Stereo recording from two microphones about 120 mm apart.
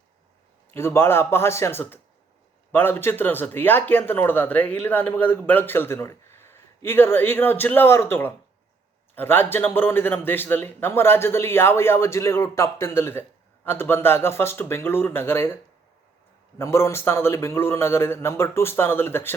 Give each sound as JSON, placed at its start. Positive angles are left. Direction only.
{"t": 0.7, "sound": "a man's voice", "side_deg": 20}
{"t": 16.6, "sound": "a man's voice", "side_deg": 20}